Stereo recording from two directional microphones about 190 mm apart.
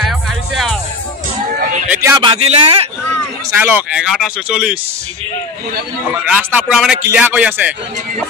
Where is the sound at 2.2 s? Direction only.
30° right (ahead or behind).